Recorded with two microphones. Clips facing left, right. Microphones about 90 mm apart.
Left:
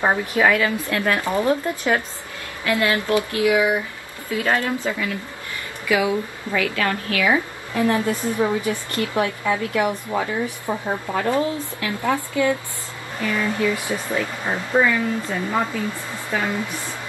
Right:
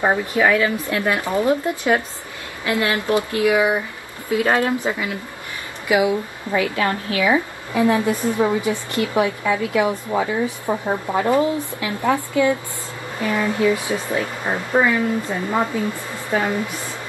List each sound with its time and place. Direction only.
0.3 s a woman's voice: 10° right (ahead or behind); by 7.3 s 30° right (ahead or behind)
7.7 s a woman's voice: 20° right (ahead or behind)